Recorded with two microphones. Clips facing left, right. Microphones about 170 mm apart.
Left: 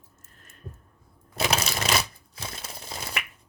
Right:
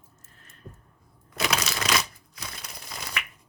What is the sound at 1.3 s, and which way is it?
Crushing, 30° left (ahead or behind).